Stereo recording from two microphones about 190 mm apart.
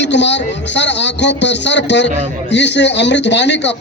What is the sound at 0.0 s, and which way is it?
A man's voice, 65° left (ahead or behind).